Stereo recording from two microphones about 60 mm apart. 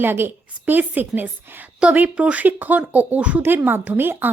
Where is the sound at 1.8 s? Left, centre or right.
Right.